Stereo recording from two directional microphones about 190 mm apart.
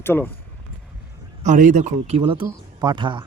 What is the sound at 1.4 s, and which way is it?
Speech, 40° right (ahead or behind).